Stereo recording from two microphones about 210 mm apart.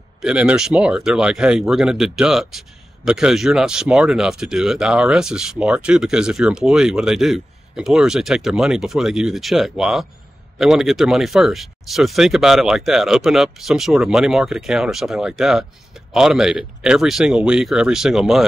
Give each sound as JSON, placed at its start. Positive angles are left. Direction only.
{"t": 0.2, "sound": "speech", "side_deg": -5}